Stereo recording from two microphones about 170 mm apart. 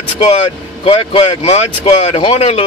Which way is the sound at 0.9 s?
40° left (ahead or behind).